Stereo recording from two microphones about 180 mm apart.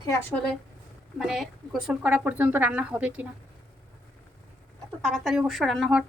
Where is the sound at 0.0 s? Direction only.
20° left (ahead or behind).